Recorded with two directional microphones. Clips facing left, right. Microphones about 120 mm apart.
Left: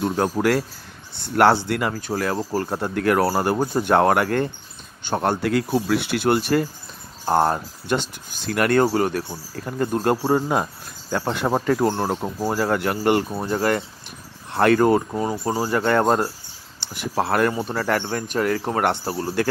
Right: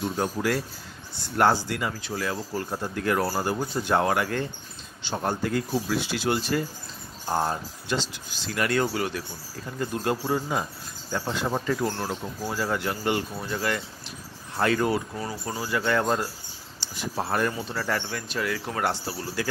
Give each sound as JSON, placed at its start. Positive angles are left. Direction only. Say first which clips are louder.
{"t": 0.0, "sound": "speech", "louder": "left 6 dB", "side_deg": 60}
{"t": 5.0, "sound": "speech", "louder": "left 6 dB", "side_deg": 70}
{"t": 14.5, "sound": "speech", "louder": "left 8 dB", "side_deg": 60}
{"t": 16.8, "sound": "speech", "louder": "left 6 dB", "side_deg": 60}